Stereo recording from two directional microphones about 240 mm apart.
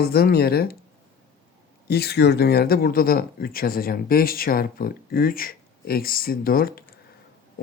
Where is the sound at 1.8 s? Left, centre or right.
Left.